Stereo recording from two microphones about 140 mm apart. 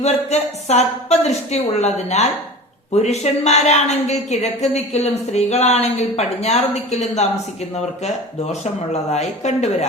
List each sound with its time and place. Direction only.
0.0 s a woman's voice: 50° left (ahead or behind)
8.9 s a woman's voice: 55° left (ahead or behind)